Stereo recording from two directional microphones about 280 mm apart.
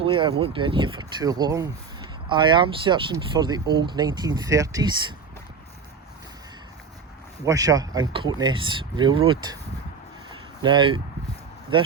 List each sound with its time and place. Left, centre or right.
0.0 s speech: centre
7.4 s speech: centre
10.6 s speech: centre